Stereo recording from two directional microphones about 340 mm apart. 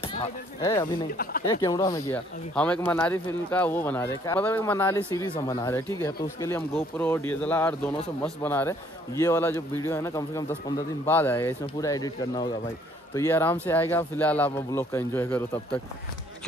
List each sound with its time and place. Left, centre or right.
0.0 s a man's voice: centre
1.1 s speech: left
1.4 s a man's voice: centre